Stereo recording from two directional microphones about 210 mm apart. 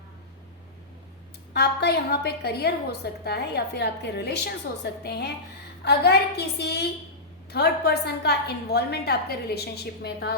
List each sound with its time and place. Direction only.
1.5 s a woman's voice: 50° left (ahead or behind)